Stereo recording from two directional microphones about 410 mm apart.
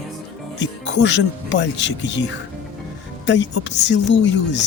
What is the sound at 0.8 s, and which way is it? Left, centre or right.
Speech, left.